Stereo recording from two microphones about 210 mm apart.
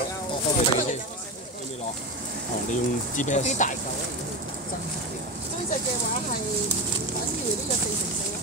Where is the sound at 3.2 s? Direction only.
35° left (ahead or behind).